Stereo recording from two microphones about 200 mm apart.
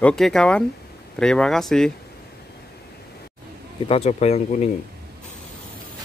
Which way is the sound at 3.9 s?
30° left (ahead or behind).